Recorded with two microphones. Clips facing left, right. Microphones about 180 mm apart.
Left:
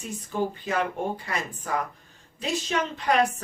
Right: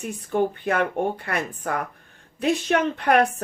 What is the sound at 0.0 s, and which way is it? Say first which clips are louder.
Speech: right 5 dB; 60° right (ahead or behind).